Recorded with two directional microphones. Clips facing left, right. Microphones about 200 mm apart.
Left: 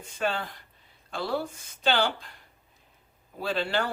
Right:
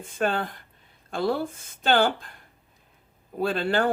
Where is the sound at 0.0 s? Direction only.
50° right (ahead or behind).